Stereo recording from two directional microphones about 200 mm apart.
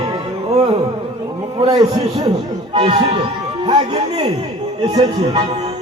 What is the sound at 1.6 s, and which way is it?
Speech, 20° right (ahead or behind).